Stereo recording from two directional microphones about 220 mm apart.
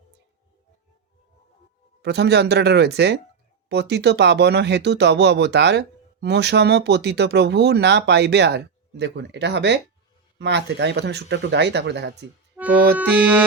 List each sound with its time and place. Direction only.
2.0 s speech: 50° right (ahead or behind)
13.0 s music: 5° right (ahead or behind)